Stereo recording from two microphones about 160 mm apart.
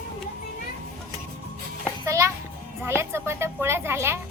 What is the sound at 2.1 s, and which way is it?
Music, 20° right (ahead or behind).